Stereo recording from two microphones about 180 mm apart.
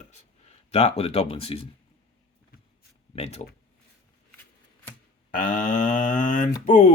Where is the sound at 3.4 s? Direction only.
35° left (ahead or behind).